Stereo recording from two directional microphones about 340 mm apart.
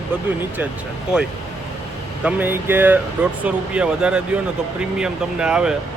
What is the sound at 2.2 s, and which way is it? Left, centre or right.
Speech, centre.